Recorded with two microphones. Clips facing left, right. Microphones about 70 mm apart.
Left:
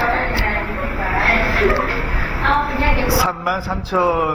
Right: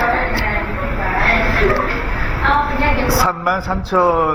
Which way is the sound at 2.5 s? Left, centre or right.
Right.